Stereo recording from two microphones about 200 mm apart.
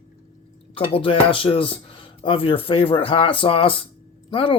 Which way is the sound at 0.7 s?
25° left (ahead or behind).